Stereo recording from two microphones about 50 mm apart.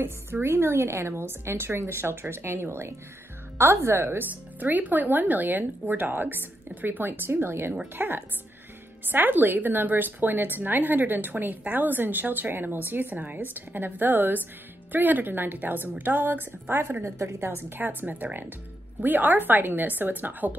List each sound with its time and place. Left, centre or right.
0.0 s a woman's voice: right
4.6 s a woman's voice: right
17.0 s a woman's voice: right
17.4 s a woman's voice: right